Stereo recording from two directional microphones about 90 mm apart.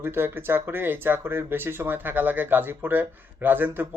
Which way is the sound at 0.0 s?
25° right (ahead or behind).